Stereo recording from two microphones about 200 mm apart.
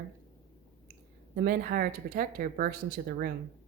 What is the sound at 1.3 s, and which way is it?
A woman's voice, 50° right (ahead or behind).